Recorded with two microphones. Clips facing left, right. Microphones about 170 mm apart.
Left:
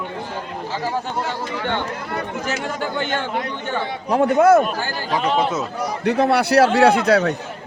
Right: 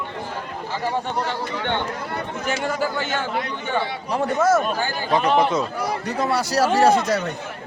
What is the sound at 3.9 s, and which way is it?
Speech, 55° left (ahead or behind).